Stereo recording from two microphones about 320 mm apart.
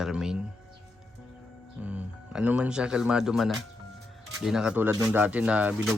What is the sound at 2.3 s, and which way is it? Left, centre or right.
Speech, centre.